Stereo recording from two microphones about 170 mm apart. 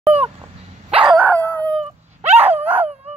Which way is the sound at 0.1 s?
35° right (ahead or behind).